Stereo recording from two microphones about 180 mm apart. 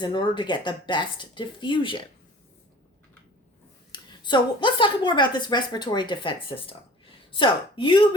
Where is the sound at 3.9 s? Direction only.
25° left (ahead or behind).